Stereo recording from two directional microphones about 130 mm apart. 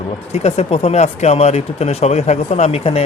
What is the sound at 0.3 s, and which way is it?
Speech, 55° left (ahead or behind).